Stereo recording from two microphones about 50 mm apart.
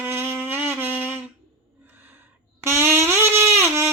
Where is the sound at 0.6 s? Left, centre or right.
Right.